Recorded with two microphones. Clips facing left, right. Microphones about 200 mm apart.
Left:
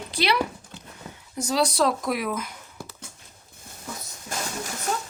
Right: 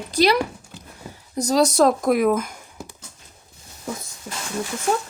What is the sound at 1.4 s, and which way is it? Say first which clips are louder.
Speech: right 6 dB; 40° right (ahead or behind).